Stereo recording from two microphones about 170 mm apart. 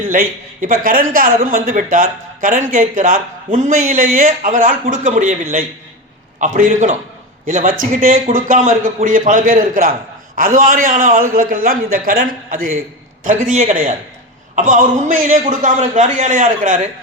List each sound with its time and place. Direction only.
0.0 s speech: 55° right (ahead or behind)